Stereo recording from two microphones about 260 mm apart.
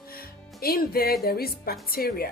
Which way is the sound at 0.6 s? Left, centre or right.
Left.